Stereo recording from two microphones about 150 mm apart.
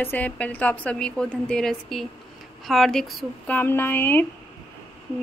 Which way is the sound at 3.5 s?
15° left (ahead or behind).